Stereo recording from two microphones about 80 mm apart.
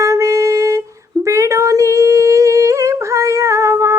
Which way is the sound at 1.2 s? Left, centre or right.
Right.